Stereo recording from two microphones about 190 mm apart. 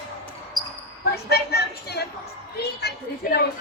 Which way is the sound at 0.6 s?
Centre (ahead or behind).